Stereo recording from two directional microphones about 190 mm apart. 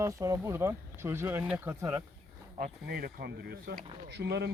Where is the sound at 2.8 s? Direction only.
55° right (ahead or behind).